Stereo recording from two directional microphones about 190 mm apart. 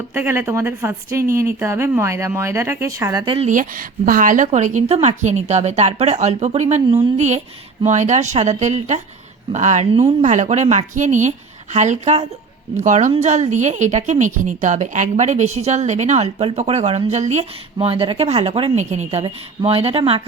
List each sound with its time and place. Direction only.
0.1 s a woman's voice: 10° right (ahead or behind); by 3.5 s 30° right (ahead or behind)
3.5 s speech: 45° right (ahead or behind); by 20.2 s 30° right (ahead or behind)